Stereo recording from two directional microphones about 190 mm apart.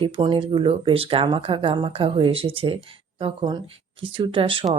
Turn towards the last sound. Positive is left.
turn(degrees=-30)  # may be behind; listen again after turning